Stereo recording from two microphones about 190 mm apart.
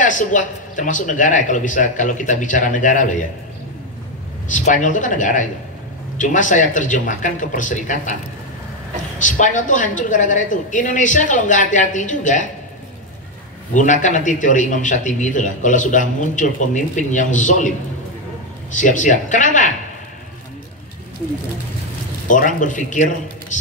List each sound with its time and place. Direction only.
0.0 s a man's voice: 40° left (ahead or behind)
4.5 s a man's voice: 40° left (ahead or behind)
9.2 s a man's voice: 40° left (ahead or behind)
13.7 s a man's voice: 40° left (ahead or behind)
18.8 s a man's voice: 40° left (ahead or behind)
22.3 s a man's voice: 40° left (ahead or behind)